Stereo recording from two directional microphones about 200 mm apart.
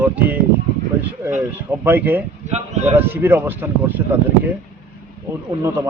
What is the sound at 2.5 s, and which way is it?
Speech, 35° right (ahead or behind).